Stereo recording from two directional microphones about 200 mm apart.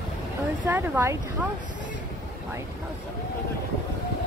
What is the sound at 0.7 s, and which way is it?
A woman's voice, 10° right (ahead or behind).